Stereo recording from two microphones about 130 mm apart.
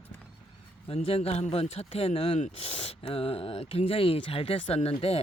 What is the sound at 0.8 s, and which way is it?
Speech, 50° left (ahead or behind).